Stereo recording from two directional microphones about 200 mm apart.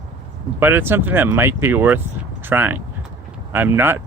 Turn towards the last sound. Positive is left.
turn(degrees=-10)  # may be behind; listen again after turning